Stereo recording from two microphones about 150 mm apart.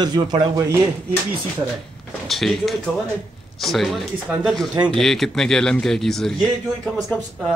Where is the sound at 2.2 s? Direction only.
Centre (ahead or behind).